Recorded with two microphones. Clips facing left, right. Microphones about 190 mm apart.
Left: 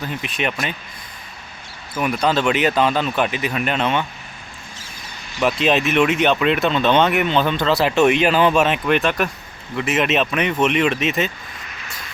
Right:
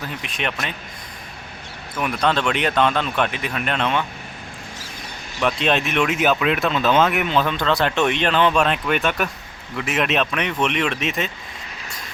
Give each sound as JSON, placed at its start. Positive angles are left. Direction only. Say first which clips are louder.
{"t": 0.0, "sound": "speech", "louder": "left 3 dB", "side_deg": 0}
{"t": 2.0, "sound": "speech", "louder": "left 2 dB", "side_deg": 0}
{"t": 5.4, "sound": "speech", "louder": "left 3 dB", "side_deg": 5}